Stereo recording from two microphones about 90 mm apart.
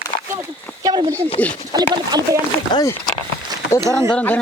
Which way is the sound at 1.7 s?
45° right (ahead or behind).